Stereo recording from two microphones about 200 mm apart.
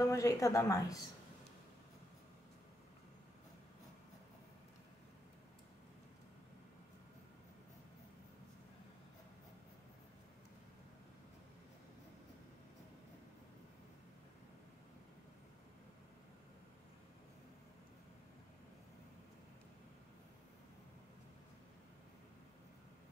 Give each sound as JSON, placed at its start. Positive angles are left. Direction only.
{"t": 0.0, "sound": "speech", "side_deg": 15}